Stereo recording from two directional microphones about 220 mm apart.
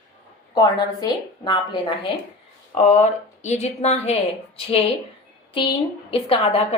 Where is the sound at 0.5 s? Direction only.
20° left (ahead or behind).